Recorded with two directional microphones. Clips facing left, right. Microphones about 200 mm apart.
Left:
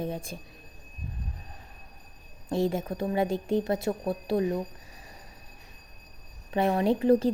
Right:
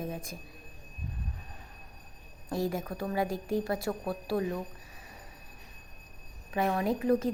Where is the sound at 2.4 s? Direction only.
25° left (ahead or behind).